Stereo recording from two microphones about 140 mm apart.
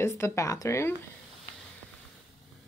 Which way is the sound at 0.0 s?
20° left (ahead or behind).